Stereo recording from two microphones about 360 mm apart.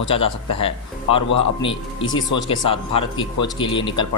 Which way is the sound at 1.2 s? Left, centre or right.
Left.